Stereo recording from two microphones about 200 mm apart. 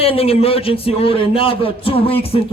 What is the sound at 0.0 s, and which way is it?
A man's voice, 30° left (ahead or behind).